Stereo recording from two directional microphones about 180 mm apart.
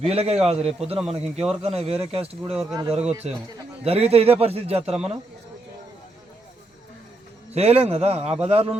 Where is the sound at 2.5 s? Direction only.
Centre (ahead or behind).